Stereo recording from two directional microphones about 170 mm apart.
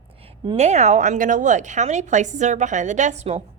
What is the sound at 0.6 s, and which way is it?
A woman's voice, 40° right (ahead or behind).